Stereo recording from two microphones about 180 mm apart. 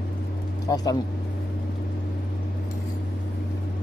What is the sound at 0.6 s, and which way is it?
Speech, 20° left (ahead or behind).